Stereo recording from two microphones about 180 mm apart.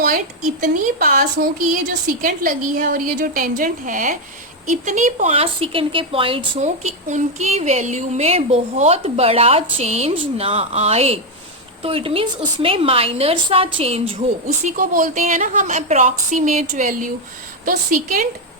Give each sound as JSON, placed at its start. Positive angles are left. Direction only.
{"t": 0.6, "sound": "a woman's voice", "side_deg": -50}
{"t": 14.4, "sound": "speech", "side_deg": -45}